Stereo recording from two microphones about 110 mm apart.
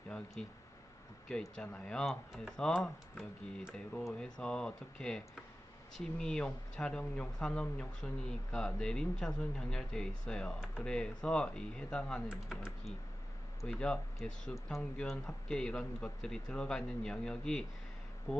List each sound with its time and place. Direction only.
0.4 s speech: 5° left (ahead or behind)
3.8 s speech: 10° left (ahead or behind)
12.3 s speech: 10° right (ahead or behind)
13.7 s speech: 10° left (ahead or behind)